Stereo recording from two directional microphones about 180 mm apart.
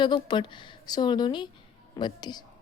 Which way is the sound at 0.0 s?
25° left (ahead or behind).